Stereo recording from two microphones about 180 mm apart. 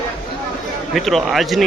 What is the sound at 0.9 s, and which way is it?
Speech, centre (ahead or behind).